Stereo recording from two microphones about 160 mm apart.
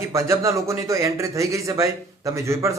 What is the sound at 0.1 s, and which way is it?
A man's voice, 20° right (ahead or behind).